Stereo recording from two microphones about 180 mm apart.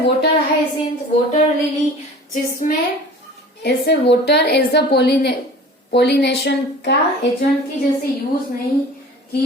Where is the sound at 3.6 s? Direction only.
70° left (ahead or behind).